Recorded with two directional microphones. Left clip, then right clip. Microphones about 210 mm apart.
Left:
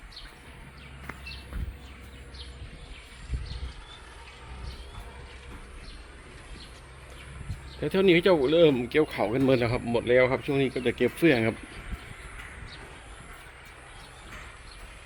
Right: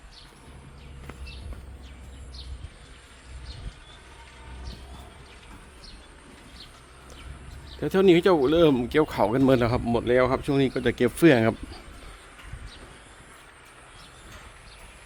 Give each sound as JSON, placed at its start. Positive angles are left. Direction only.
{"t": 7.8, "sound": "speech", "side_deg": -15}
{"t": 10.5, "sound": "speech", "side_deg": -25}